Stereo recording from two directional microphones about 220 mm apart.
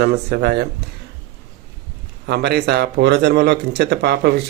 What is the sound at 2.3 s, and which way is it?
Speech, 50° right (ahead or behind).